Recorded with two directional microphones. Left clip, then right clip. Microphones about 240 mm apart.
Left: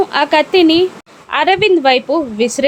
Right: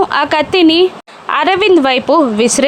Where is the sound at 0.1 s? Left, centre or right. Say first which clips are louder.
Even; centre.